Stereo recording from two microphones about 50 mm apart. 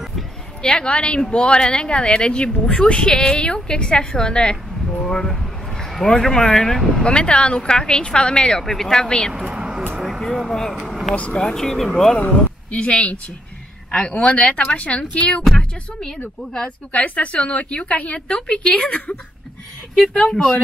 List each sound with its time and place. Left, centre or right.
0.6 s a woman's voice: centre
7.1 s a woman's voice: left
9.3 s a sound: centre
10.7 s speech: centre
11.1 s a woman's voice: left
11.4 s a woman's voice: centre
12.2 s a woman's voice: left
15.4 s speech: centre
16.5 s a woman's voice: left
18.9 s a woman's voice: left
20.2 s a woman's voice: centre